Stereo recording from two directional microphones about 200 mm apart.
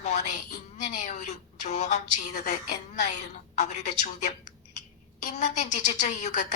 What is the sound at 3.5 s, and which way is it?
A woman's voice, 35° left (ahead or behind).